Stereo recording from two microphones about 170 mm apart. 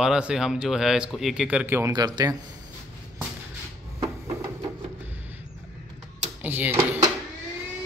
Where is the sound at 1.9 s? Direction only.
25° right (ahead or behind).